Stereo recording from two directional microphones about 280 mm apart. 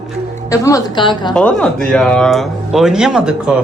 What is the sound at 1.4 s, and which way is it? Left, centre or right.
Speech, centre.